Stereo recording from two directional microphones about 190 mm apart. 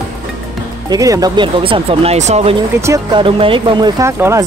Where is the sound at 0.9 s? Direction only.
20° right (ahead or behind); by 2.5 s 35° right (ahead or behind).